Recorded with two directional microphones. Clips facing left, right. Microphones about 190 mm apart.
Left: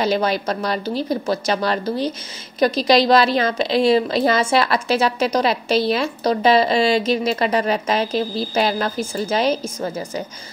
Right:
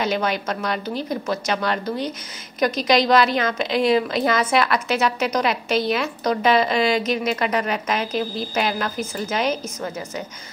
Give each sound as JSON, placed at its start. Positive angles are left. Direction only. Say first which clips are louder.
{"t": 0.0, "sound": "a woman's voice", "louder": "left 3 dB", "side_deg": 35}